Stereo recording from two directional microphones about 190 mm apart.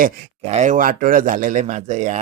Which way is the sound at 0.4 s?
35° right (ahead or behind).